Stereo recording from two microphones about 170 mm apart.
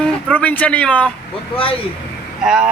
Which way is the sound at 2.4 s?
5° right (ahead or behind).